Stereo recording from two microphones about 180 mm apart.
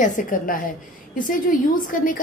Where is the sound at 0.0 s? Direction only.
50° left (ahead or behind).